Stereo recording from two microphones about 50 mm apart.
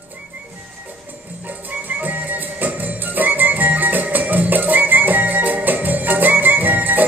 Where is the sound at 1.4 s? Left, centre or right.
Right.